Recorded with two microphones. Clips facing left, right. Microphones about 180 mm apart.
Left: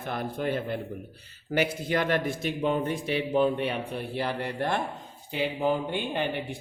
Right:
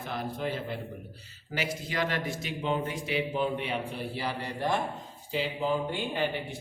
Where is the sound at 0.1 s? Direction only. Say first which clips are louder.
Left 4 dB; 55° left (ahead or behind).